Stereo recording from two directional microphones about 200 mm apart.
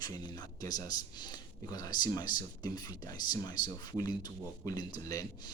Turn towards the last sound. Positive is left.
turn(degrees=20)  # may be behind; listen again after turning